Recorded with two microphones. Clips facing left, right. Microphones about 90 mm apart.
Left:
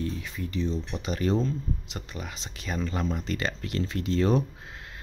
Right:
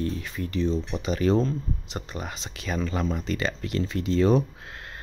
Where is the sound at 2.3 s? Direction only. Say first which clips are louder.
Right 3 dB; 90° right.